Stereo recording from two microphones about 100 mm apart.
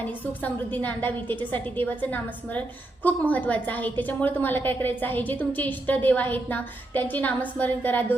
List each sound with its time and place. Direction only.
0.0 s a woman's voice: 15° left (ahead or behind)